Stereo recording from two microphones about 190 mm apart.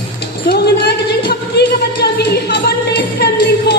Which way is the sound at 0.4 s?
60° left (ahead or behind).